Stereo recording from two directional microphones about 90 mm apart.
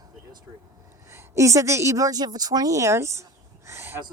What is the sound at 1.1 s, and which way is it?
Speech, 30° right (ahead or behind).